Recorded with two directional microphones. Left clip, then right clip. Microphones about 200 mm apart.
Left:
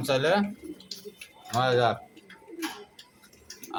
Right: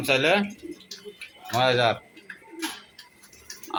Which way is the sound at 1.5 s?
35° right (ahead or behind).